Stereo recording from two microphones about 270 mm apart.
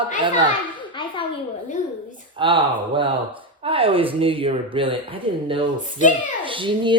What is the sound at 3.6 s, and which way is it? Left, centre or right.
Speech, centre.